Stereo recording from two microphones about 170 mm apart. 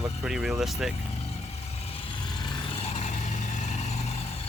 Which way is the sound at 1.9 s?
30° left (ahead or behind).